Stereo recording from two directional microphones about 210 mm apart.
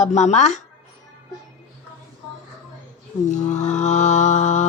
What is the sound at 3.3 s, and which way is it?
Mantra, 35° left (ahead or behind).